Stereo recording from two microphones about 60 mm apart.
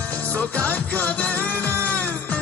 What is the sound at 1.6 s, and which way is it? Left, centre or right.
Music, right.